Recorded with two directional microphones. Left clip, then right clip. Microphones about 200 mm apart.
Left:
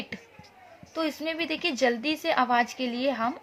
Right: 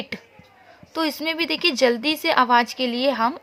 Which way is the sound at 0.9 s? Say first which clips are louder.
Right 6 dB; 35° right (ahead or behind).